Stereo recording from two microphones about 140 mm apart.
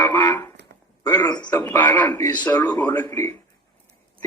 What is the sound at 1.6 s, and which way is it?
Speech, 15° left (ahead or behind).